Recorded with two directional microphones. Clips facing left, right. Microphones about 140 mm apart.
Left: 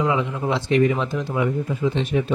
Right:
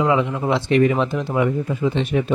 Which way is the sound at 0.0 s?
65° right (ahead or behind).